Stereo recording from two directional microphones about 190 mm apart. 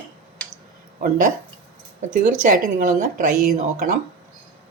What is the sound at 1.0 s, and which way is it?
Speech, 45° right (ahead or behind).